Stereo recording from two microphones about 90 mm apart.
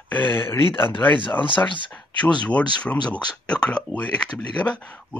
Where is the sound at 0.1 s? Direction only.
20° left (ahead or behind).